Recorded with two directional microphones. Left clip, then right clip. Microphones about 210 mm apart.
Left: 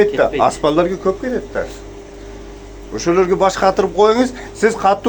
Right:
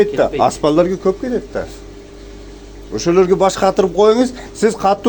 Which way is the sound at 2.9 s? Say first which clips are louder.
Right 2 dB; 50° right (ahead or behind).